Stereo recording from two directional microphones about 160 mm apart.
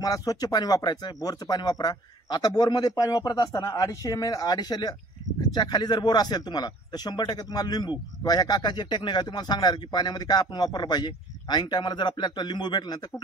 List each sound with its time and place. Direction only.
0.0 s speech: 25° left (ahead or behind)